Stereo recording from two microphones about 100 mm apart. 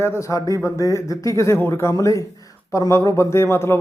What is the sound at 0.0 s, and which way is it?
A man's voice, 30° left (ahead or behind).